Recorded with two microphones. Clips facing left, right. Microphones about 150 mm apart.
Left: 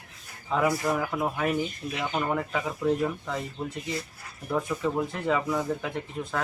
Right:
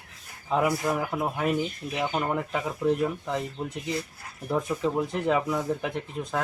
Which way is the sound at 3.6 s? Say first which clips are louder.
Right 2 dB; 15° right (ahead or behind).